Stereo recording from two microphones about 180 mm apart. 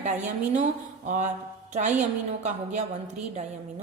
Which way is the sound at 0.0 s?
40° right (ahead or behind).